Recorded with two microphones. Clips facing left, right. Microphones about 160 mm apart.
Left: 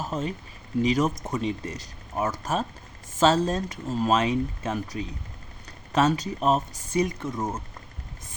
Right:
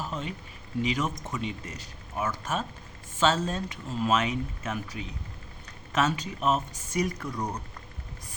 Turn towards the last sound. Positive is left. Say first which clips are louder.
# left 3 dB
turn(degrees=20)  # may be behind; listen again after turning